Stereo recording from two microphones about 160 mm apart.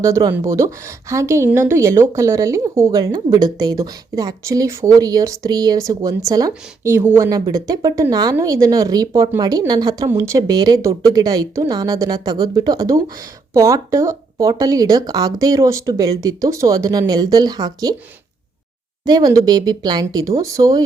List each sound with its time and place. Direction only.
0.0 s a woman's voice: 20° right (ahead or behind)
19.0 s speech: 25° right (ahead or behind)